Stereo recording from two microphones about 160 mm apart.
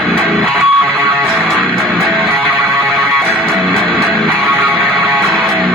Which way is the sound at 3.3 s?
10° right (ahead or behind).